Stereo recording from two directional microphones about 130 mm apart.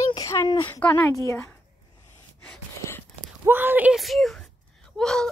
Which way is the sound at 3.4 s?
15° right (ahead or behind).